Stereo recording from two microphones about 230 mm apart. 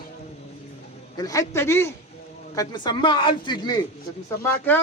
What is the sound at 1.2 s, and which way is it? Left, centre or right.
Speech, centre.